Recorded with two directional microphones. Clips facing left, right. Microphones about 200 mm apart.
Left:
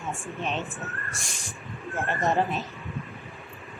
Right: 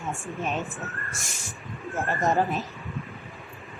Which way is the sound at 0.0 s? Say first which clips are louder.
Right 1 dB; centre (ahead or behind).